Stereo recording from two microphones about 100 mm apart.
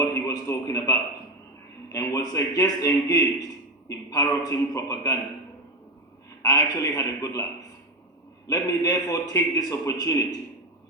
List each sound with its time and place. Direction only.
0.0 s a sound: 35° left (ahead or behind)
1.9 s a man's voice: 35° left (ahead or behind)
6.4 s a man's voice: 35° left (ahead or behind)
8.4 s a man's voice: 35° left (ahead or behind)